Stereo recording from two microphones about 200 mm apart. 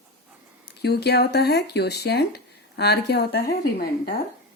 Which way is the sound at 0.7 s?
55° left (ahead or behind).